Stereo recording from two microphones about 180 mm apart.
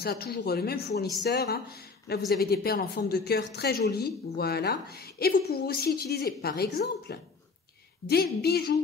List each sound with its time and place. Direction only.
0.0 s a woman's voice: 60° left (ahead or behind)